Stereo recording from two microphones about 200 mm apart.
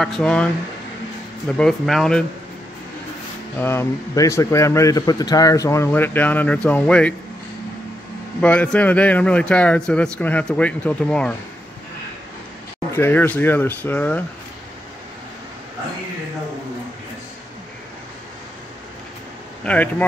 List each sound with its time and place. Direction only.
0.0 s speech: 5° left (ahead or behind)
1.6 s speech: centre (ahead or behind)
3.5 s speech: 10° left (ahead or behind)
8.4 s speech: 5° left (ahead or behind)
12.9 s speech: 10° left (ahead or behind)
19.6 s speech: 5° left (ahead or behind)